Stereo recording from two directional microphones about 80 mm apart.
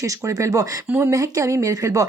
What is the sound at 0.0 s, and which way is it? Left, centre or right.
A woman's voice, right.